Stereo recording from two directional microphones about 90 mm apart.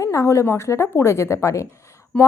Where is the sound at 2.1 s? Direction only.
10° left (ahead or behind).